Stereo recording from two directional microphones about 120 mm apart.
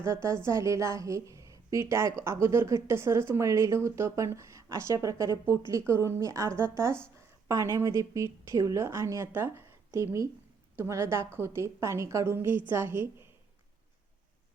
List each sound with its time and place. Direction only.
0.0 s a woman's voice: 25° right (ahead or behind)